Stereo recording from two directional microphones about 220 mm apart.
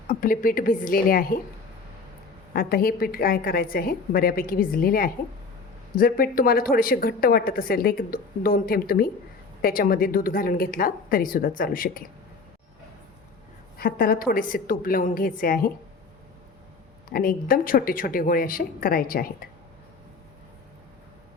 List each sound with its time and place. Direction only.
0.1 s a woman's voice: 40° left (ahead or behind)
2.5 s a woman's voice: 40° left (ahead or behind)
13.7 s a woman's voice: 40° left (ahead or behind)
17.1 s a woman's voice: 40° left (ahead or behind)